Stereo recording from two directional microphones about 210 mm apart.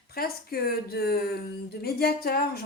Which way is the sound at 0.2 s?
45° left (ahead or behind).